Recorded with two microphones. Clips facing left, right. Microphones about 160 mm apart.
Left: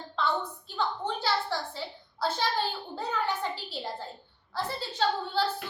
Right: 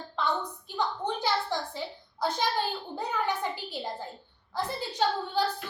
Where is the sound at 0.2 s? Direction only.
15° right (ahead or behind).